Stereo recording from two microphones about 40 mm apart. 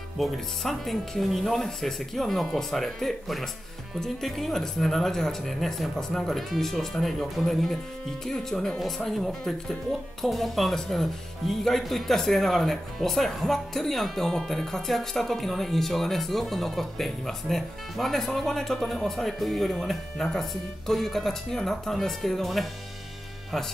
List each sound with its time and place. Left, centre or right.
0.2 s speech: centre